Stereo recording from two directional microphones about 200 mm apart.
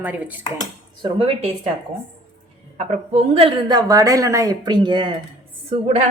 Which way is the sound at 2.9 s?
30° right (ahead or behind).